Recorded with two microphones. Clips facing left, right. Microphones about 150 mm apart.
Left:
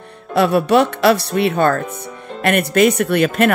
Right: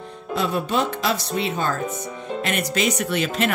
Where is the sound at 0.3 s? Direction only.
70° left (ahead or behind).